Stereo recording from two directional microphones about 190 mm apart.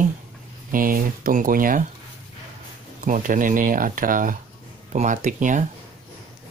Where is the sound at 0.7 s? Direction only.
45° right (ahead or behind).